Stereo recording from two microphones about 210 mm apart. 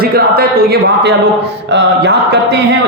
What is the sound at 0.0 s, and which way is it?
A man's voice, 45° right (ahead or behind).